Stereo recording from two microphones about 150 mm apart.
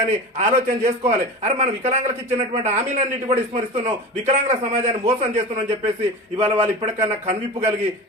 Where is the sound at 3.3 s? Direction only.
45° right (ahead or behind).